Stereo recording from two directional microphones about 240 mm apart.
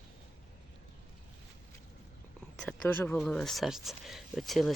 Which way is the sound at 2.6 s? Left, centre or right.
Centre.